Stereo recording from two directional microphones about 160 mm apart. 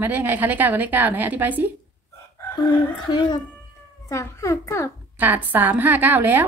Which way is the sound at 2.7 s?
30° left (ahead or behind).